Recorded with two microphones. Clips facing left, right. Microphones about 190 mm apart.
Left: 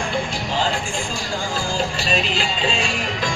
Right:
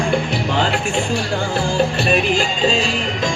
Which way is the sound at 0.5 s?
70° right (ahead or behind).